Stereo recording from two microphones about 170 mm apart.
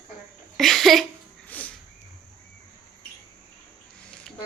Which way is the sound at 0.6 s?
Centre (ahead or behind).